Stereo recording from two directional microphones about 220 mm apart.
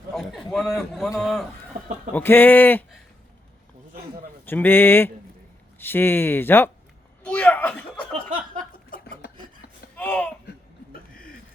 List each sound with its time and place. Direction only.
0.1 s a man's voice: centre (ahead or behind)
4.4 s speech: 10° left (ahead or behind)
7.3 s chuckle: 5° left (ahead or behind)
8.7 s chuckle: 40° left (ahead or behind)
9.9 s a sound: 5° left (ahead or behind)
10.9 s a sound: 40° left (ahead or behind)